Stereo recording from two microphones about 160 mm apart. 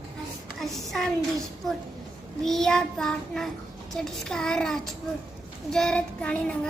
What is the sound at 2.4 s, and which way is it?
Child singing, 5° left (ahead or behind).